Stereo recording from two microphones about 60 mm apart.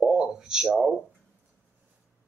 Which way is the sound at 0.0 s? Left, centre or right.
Centre.